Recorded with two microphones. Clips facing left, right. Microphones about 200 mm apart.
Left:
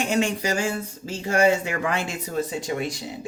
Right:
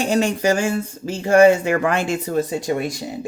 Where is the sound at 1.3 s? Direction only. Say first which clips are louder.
Right 8 dB; 55° right (ahead or behind).